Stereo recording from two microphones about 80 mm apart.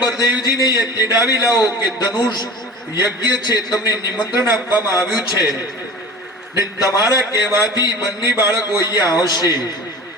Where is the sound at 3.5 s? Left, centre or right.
Left.